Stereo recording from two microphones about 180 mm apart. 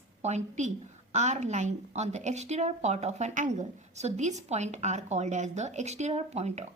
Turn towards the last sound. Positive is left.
turn(degrees=-40)  # may be behind; listen again after turning